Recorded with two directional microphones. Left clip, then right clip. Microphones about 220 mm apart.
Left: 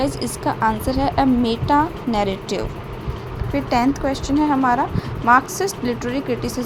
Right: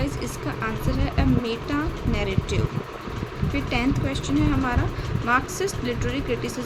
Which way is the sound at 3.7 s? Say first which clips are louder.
Left 8 dB; 25° left (ahead or behind).